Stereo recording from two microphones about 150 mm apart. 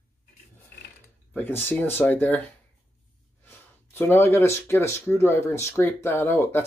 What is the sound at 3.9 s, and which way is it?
Speech, 15° left (ahead or behind).